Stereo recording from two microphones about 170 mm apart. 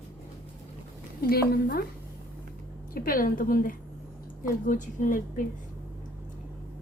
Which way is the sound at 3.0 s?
55° left (ahead or behind).